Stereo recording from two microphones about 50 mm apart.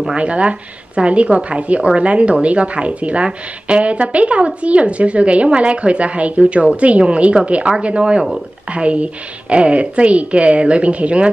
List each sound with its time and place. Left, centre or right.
0.1 s a woman's voice: right